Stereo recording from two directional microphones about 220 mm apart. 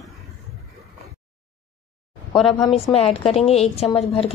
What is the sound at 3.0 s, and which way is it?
Speech, 25° left (ahead or behind).